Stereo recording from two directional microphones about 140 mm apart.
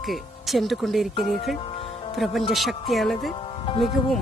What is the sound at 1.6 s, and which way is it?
Music, 40° left (ahead or behind).